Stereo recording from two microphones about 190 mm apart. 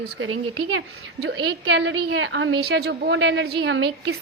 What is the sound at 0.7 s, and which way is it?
A woman's voice, 90° right.